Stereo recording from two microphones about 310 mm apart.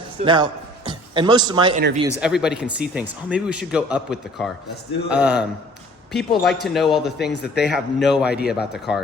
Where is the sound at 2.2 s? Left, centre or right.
Centre.